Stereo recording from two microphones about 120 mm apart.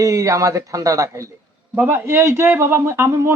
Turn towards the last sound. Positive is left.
turn(degrees=-20)  # may be behind; listen again after turning